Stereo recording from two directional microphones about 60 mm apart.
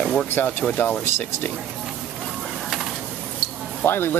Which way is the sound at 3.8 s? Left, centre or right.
Left.